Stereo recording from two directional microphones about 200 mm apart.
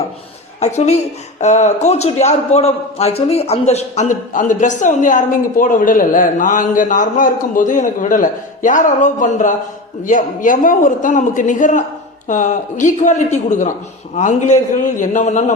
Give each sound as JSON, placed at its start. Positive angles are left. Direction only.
{"t": 0.6, "sound": "a man's voice", "side_deg": 35}